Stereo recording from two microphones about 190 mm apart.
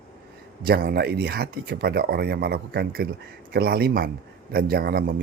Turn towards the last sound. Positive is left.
turn(degrees=-55)  # may be behind; listen again after turning